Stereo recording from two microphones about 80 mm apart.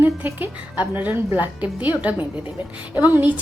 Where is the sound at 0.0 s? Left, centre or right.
Right.